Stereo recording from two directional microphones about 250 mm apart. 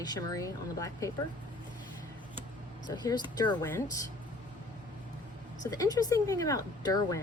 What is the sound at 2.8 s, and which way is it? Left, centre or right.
Speech, centre.